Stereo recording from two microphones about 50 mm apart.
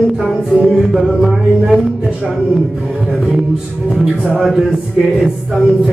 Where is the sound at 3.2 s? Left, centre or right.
Centre.